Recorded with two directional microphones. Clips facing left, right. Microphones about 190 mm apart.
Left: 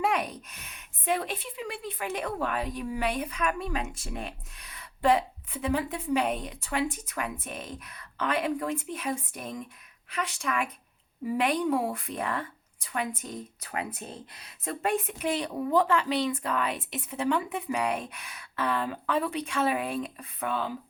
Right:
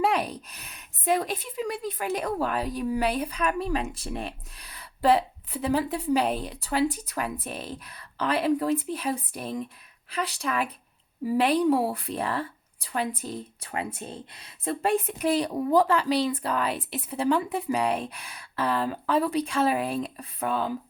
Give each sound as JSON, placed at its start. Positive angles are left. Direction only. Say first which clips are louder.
{"t": 0.0, "sound": "a woman's voice", "louder": "right 3 dB", "side_deg": -35}